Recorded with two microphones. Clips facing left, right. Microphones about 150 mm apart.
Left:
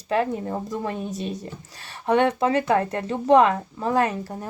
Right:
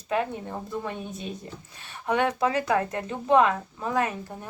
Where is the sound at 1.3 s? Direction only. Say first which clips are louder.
Left 5 dB; 90° left.